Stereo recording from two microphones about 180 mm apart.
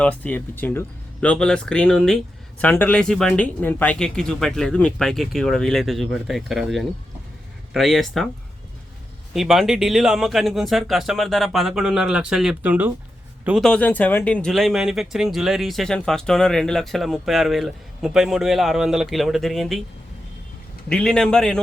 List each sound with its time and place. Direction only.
0.0 s speech: 10° left (ahead or behind)
9.3 s speech: centre (ahead or behind)
20.9 s speech: 5° left (ahead or behind)